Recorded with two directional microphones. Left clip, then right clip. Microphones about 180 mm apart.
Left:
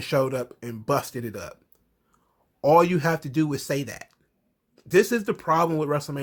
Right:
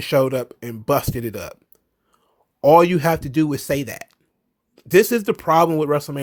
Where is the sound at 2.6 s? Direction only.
45° right (ahead or behind).